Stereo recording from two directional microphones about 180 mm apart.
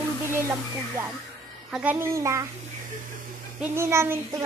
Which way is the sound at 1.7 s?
10° right (ahead or behind).